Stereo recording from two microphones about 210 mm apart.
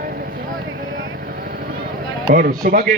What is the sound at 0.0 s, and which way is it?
Vehicle, 45° right (ahead or behind).